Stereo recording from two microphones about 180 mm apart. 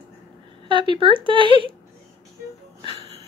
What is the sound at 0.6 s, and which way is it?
Speech, 30° right (ahead or behind).